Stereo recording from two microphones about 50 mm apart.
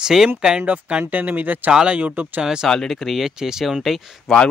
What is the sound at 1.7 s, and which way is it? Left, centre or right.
Speech, centre.